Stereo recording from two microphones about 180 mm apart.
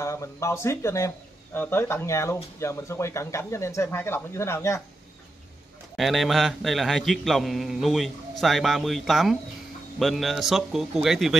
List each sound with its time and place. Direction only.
0.0 s speech: 15° left (ahead or behind)
5.9 s a man's voice: centre (ahead or behind)